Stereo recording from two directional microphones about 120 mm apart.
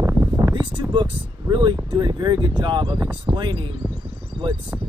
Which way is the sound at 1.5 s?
40° right (ahead or behind).